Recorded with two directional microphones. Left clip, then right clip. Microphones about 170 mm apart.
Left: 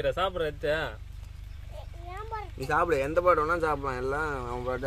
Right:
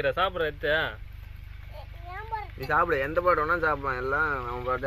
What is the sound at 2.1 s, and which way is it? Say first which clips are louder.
Speech: right 3 dB; 45° left (ahead or behind).